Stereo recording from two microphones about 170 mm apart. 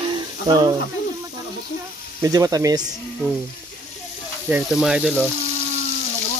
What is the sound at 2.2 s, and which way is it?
Speech, 20° right (ahead or behind).